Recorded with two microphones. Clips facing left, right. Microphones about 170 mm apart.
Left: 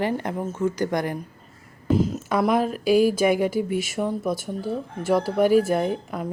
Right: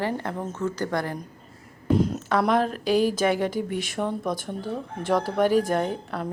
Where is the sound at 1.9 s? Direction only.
Centre (ahead or behind).